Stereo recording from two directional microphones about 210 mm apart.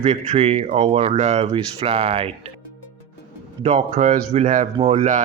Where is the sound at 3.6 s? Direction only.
30° right (ahead or behind).